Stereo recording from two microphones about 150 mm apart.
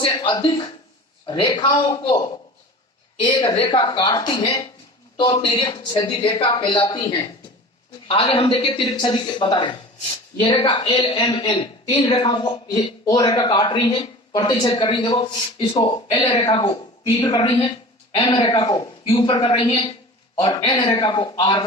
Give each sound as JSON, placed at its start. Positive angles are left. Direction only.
{"t": 0.0, "sound": "a man's voice", "side_deg": 30}
{"t": 3.2, "sound": "a man's voice", "side_deg": 35}
{"t": 20.4, "sound": "a woman's voice", "side_deg": 25}